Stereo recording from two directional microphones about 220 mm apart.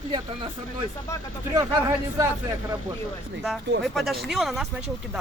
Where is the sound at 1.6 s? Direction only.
15° right (ahead or behind).